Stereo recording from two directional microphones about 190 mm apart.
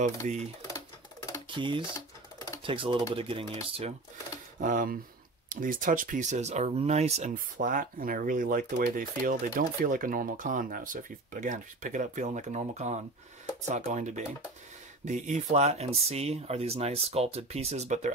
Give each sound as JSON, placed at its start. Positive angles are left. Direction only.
{"t": 0.2, "sound": "speech", "side_deg": -40}
{"t": 0.6, "sound": "music", "side_deg": 15}
{"t": 1.5, "sound": "speech", "side_deg": -25}
{"t": 2.0, "sound": "typing", "side_deg": 15}
{"t": 2.6, "sound": "speech", "side_deg": -25}
{"t": 4.6, "sound": "speech", "side_deg": -45}